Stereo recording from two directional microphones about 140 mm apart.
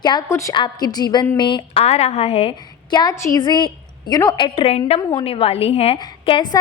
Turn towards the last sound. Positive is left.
turn(degrees=35)  # may be behind; listen again after turning